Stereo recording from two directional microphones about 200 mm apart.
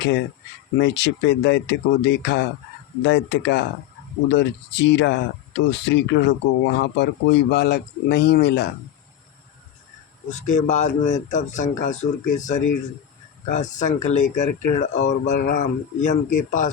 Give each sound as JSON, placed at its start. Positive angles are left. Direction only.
{"t": 0.8, "sound": "speech", "side_deg": 60}
{"t": 10.4, "sound": "speech", "side_deg": 35}